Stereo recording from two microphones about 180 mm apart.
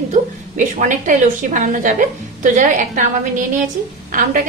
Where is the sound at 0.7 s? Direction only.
45° right (ahead or behind).